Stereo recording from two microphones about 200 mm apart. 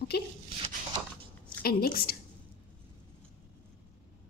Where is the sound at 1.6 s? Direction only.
50° left (ahead or behind).